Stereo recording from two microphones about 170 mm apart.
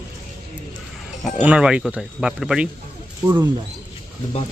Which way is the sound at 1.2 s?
5° right (ahead or behind).